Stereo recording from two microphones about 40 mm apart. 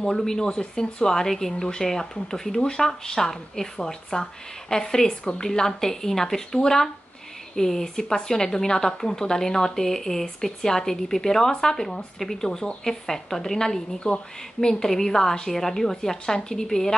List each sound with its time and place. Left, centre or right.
0.2 s speech: centre